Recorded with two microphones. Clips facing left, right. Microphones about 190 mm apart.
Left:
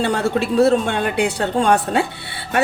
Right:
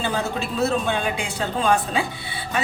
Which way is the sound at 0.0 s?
70° left (ahead or behind).